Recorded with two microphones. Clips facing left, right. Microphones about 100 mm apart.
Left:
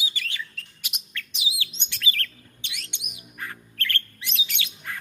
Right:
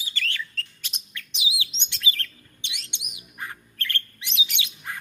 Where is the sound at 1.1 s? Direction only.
20° right (ahead or behind).